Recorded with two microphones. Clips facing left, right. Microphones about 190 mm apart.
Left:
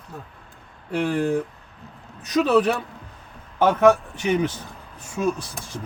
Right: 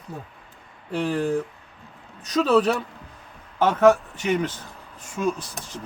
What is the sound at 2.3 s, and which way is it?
Speech, 10° left (ahead or behind).